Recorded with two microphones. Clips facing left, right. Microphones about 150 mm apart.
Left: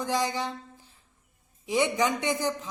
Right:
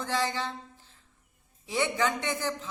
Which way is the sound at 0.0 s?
15° left (ahead or behind).